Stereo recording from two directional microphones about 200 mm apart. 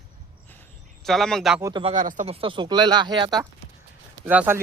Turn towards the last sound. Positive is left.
turn(degrees=-10)  # may be behind; listen again after turning